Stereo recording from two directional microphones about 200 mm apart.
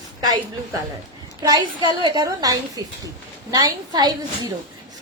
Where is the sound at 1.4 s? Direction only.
20° right (ahead or behind).